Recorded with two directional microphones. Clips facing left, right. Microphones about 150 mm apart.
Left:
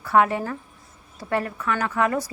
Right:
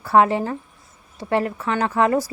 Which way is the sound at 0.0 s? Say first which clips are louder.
Right 3 dB; 30° right (ahead or behind).